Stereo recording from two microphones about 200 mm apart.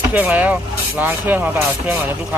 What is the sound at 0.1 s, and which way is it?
Speech, 10° right (ahead or behind).